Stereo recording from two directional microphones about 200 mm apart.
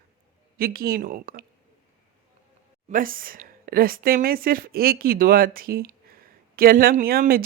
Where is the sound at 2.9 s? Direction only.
45° right (ahead or behind).